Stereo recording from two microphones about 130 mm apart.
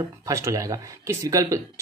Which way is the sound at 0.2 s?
25° right (ahead or behind).